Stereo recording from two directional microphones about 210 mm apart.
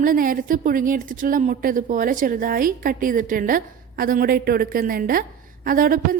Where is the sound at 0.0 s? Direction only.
40° right (ahead or behind).